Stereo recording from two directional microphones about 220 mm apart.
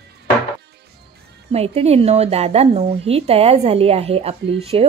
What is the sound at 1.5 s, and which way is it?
A woman's voice, 30° right (ahead or behind).